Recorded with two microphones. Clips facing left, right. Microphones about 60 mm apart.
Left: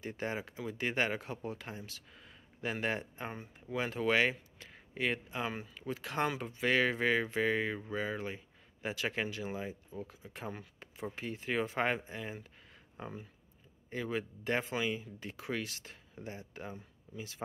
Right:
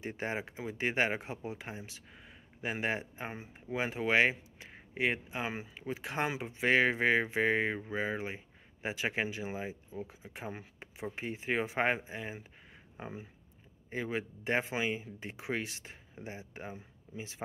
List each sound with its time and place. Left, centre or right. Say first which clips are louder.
0.0 s speech: right 1 dB; right
6.5 s speech: right 5 dB; right